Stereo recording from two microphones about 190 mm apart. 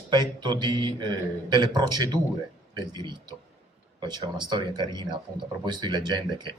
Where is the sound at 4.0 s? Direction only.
20° right (ahead or behind).